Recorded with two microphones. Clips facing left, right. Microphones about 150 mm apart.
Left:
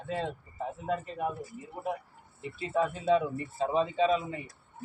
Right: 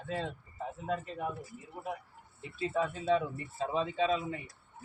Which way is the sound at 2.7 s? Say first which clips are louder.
Left 4 dB; 35° left (ahead or behind).